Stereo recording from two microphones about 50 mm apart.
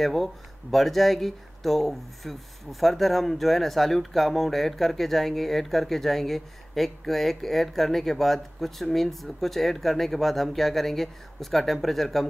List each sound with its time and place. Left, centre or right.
0.0 s speech: centre